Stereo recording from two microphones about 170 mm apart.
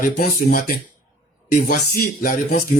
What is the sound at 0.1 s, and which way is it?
A man's voice, 55° left (ahead or behind).